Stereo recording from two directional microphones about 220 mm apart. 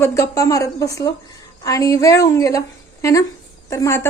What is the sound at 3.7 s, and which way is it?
Speech, 15° left (ahead or behind).